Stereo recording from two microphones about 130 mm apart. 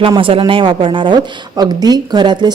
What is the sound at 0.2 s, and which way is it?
A woman's voice, 45° right (ahead or behind).